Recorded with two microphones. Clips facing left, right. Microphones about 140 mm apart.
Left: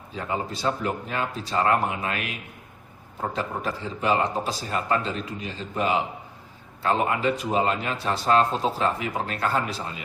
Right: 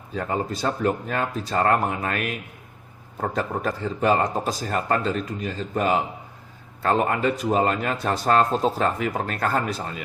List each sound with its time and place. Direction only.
0.1 s speech: 45° right (ahead or behind)
3.3 s speech: 45° right (ahead or behind)